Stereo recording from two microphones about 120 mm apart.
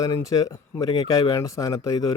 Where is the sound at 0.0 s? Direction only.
30° left (ahead or behind).